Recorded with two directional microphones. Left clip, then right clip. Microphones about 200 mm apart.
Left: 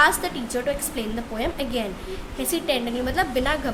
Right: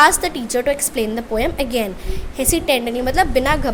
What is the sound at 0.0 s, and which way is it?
A woman's voice, 35° right (ahead or behind).